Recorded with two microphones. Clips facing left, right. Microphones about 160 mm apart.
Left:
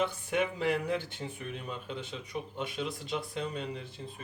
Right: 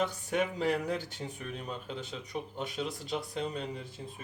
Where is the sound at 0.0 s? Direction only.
45° right (ahead or behind).